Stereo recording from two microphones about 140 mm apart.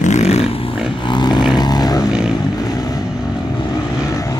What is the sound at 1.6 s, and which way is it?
Vehicle, 30° left (ahead or behind).